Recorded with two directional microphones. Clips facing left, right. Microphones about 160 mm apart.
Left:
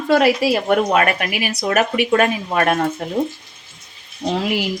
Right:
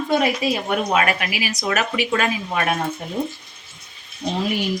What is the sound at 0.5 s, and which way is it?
Speech, 65° left (ahead or behind).